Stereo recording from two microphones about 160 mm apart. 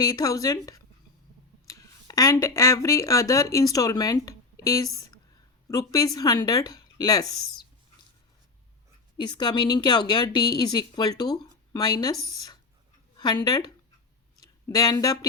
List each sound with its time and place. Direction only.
0.0 s a woman's voice: 20° left (ahead or behind)
9.1 s speech: 30° left (ahead or behind)